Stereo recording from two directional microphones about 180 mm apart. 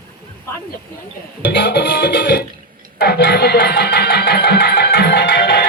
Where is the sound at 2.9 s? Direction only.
65° left (ahead or behind).